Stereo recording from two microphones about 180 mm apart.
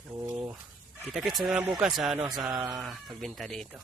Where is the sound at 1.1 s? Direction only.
Centre (ahead or behind).